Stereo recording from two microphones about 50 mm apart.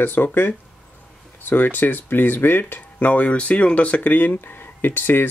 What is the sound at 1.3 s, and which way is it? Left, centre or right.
Speech, left.